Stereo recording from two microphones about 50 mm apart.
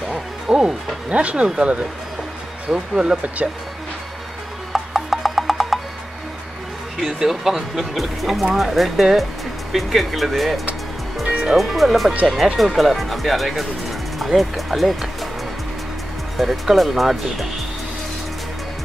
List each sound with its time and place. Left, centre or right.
0.1 s music: centre
1.0 s speech: right
2.7 s speech: centre
4.7 s music: centre
7.0 s speech: centre
11.2 s music: centre
11.5 s speech: centre
16.3 s speech: centre